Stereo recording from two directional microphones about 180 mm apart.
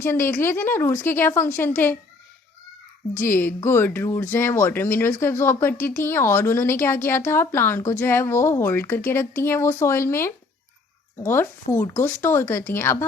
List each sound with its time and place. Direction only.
0.0 s a woman's voice: 15° left (ahead or behind)
3.2 s a woman's voice: 10° left (ahead or behind)